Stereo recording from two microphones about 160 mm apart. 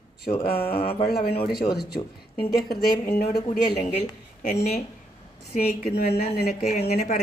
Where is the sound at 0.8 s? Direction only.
35° left (ahead or behind).